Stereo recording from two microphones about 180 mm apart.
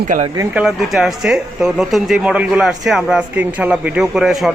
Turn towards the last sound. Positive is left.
turn(degrees=0)  # may be behind; listen again after turning